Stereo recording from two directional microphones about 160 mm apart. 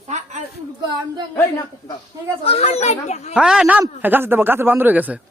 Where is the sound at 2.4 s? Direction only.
40° left (ahead or behind).